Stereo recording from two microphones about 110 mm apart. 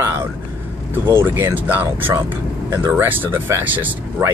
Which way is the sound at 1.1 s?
20° right (ahead or behind).